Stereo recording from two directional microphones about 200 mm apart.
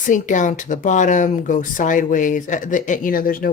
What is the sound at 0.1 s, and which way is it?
Speech, 40° left (ahead or behind).